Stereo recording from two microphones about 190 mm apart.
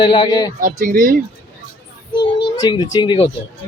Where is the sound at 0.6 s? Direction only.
45° right (ahead or behind).